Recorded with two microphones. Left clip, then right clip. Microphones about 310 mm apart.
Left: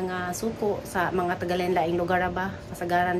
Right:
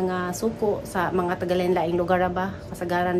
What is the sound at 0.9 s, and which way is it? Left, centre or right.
A woman's voice, centre.